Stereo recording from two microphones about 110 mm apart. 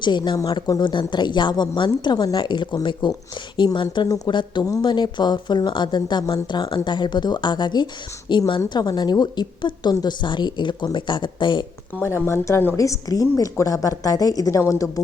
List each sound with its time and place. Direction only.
0.0 s a woman's voice: 45° left (ahead or behind)
12.0 s a woman's voice: 25° left (ahead or behind)